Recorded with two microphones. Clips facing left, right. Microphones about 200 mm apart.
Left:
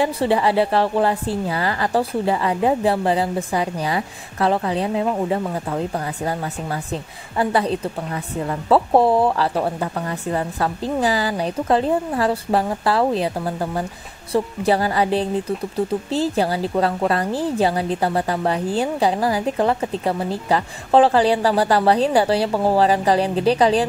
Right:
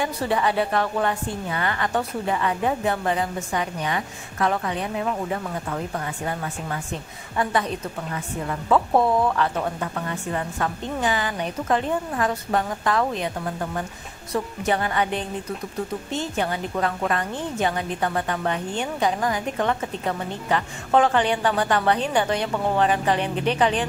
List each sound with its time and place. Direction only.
0.0 s a woman's voice: 30° left (ahead or behind)